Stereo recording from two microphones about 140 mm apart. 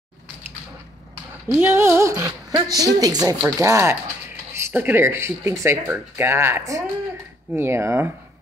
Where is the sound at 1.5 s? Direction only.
15° right (ahead or behind).